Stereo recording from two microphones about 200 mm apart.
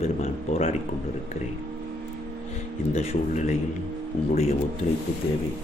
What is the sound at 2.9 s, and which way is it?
Speech, 35° left (ahead or behind).